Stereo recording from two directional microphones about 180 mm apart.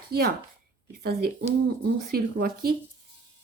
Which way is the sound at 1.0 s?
60° right (ahead or behind).